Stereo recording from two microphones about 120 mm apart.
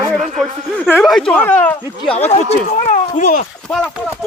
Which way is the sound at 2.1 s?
65° left (ahead or behind).